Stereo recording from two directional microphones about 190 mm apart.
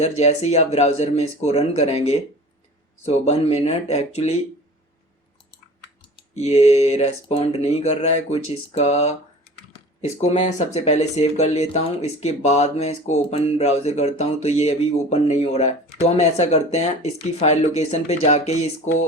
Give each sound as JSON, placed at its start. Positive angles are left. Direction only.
{"t": 0.0, "sound": "speech", "side_deg": 35}
{"t": 6.1, "sound": "speech", "side_deg": 35}